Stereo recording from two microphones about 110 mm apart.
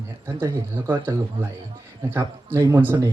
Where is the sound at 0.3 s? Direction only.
20° right (ahead or behind).